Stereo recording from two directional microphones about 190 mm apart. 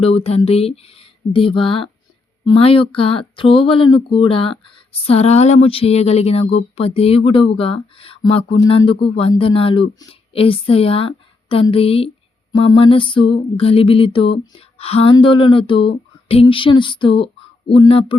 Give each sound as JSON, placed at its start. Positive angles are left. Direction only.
{"t": 0.0, "sound": "speech", "side_deg": 30}